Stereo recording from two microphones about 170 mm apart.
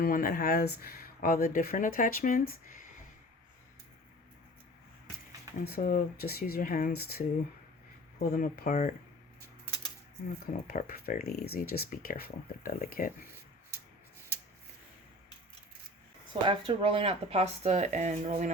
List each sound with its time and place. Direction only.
0.0 s speech: 55° left (ahead or behind)
5.6 s speech: 65° left (ahead or behind)
10.4 s speech: 60° left (ahead or behind)
16.3 s speech: 30° right (ahead or behind); by 18.5 s 45° right (ahead or behind)